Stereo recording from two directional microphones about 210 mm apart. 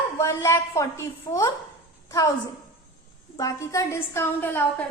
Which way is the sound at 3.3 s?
15° left (ahead or behind).